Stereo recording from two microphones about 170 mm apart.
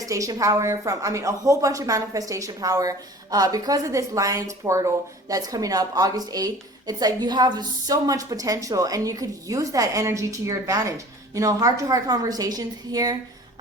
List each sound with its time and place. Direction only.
0.0 s a woman's voice: 20° right (ahead or behind)